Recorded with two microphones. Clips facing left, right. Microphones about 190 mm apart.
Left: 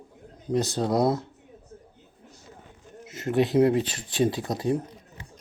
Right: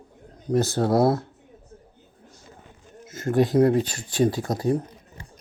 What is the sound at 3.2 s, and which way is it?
Speech, 20° left (ahead or behind).